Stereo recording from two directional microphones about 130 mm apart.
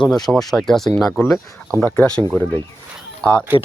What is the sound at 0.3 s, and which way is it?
Speech, 5° left (ahead or behind).